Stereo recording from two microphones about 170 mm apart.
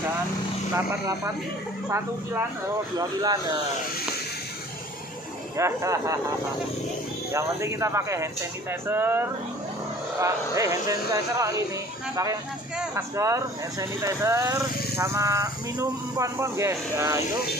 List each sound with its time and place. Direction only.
0.7 s speech: 15° right (ahead or behind)
3.0 s speech: 25° right (ahead or behind)
5.6 s speech: 15° right (ahead or behind)
7.3 s speech: 15° right (ahead or behind)
12.9 s speech: 15° right (ahead or behind)